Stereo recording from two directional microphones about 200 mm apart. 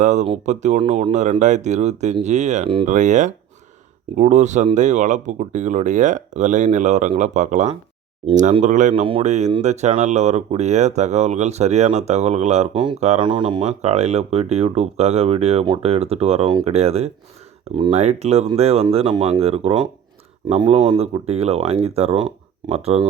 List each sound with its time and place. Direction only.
0.0 s speech: 35° right (ahead or behind)